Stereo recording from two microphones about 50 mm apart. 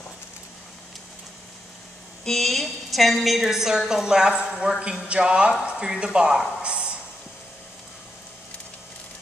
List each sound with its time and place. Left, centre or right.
2.2 s a woman's voice: centre; by 7.0 s right